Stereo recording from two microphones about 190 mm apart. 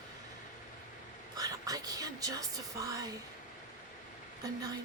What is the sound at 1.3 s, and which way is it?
Speech, 20° right (ahead or behind).